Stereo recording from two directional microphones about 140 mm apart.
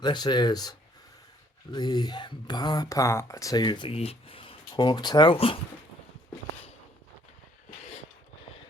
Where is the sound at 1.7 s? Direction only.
30° left (ahead or behind).